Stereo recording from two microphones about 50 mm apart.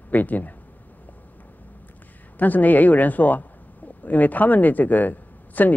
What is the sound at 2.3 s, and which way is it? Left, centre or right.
Speech, left.